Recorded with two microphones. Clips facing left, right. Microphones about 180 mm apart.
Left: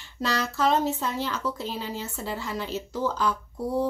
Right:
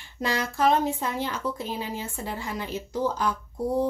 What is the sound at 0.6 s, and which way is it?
Speech, 50° right (ahead or behind).